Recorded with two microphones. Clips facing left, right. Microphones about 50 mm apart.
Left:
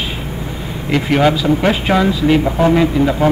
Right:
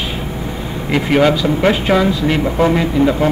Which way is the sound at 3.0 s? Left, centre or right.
Right.